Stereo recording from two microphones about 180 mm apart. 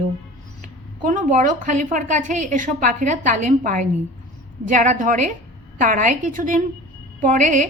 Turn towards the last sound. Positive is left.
turn(degrees=-45)  # may be behind; listen again after turning